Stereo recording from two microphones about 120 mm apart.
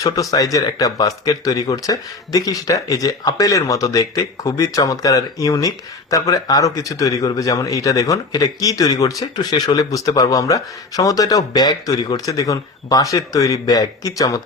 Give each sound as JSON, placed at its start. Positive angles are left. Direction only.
{"t": 0.0, "sound": "speech", "side_deg": 30}